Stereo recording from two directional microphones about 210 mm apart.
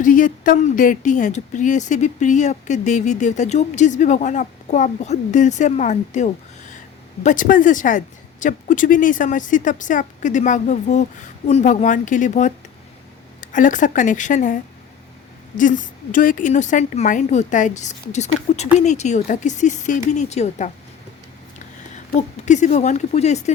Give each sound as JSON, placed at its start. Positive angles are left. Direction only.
{"t": 0.0, "sound": "speech", "side_deg": 40}
{"t": 22.4, "sound": "speech", "side_deg": 35}